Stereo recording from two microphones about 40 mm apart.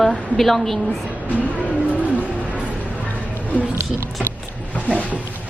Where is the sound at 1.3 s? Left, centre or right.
Left.